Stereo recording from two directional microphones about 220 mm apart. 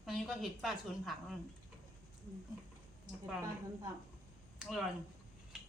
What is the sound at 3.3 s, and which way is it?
Speech, 10° right (ahead or behind).